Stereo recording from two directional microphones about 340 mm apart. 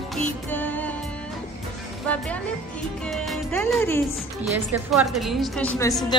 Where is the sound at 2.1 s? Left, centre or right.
Centre.